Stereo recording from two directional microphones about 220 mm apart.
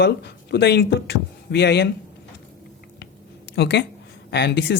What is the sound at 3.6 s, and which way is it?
Speech, 50° left (ahead or behind).